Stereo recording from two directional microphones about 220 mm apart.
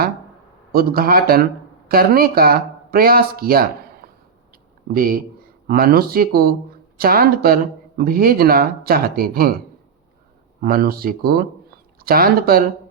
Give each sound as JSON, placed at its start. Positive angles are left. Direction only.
{"t": 0.7, "sound": "speech", "side_deg": -40}
{"t": 4.9, "sound": "speech", "side_deg": -40}
{"t": 10.6, "sound": "speech", "side_deg": -40}